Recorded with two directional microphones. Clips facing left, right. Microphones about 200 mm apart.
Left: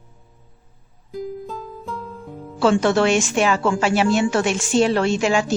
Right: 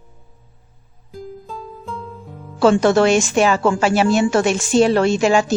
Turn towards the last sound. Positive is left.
turn(degrees=-40)  # may be behind; listen again after turning